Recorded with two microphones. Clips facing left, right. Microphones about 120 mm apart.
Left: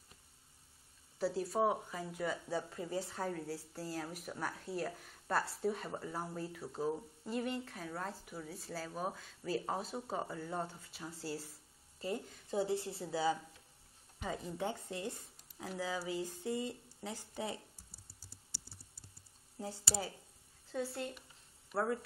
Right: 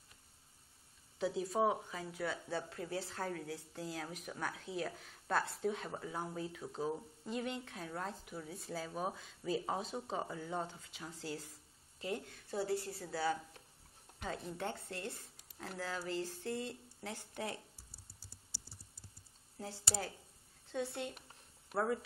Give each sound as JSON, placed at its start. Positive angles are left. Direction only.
{"t": 1.2, "sound": "speech", "side_deg": 0}
{"t": 12.4, "sound": "a woman's voice", "side_deg": 20}
{"t": 14.2, "sound": "speech", "side_deg": 5}
{"t": 20.7, "sound": "speech", "side_deg": 0}